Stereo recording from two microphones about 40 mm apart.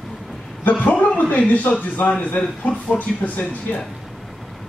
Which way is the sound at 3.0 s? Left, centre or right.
Left.